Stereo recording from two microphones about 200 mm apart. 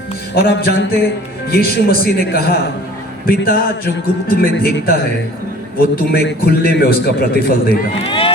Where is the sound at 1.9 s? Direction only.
50° left (ahead or behind).